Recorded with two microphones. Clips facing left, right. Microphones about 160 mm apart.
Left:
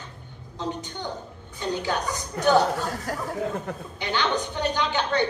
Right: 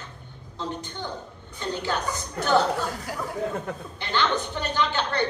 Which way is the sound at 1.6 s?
15° left (ahead or behind).